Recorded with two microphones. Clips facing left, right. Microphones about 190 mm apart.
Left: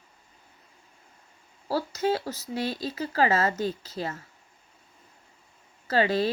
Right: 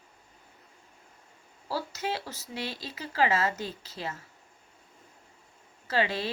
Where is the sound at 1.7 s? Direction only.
45° left (ahead or behind).